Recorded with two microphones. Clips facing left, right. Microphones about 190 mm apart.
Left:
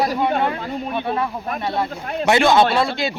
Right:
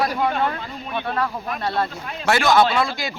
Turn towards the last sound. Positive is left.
turn(degrees=30)  # may be behind; listen again after turning